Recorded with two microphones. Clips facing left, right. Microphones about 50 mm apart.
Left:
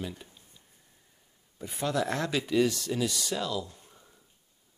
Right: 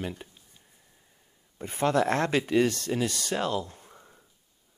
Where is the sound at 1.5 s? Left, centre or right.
Right.